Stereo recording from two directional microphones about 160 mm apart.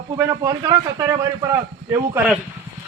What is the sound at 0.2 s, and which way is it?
Speech, 20° right (ahead or behind).